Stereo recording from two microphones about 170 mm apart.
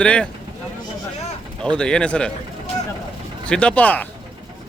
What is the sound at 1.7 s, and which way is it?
Speech, 5° left (ahead or behind).